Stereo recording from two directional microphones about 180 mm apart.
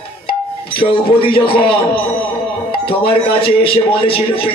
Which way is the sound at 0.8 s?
30° left (ahead or behind).